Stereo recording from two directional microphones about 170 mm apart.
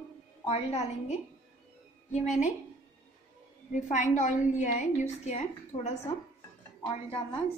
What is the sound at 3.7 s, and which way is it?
A woman's voice, 45° left (ahead or behind).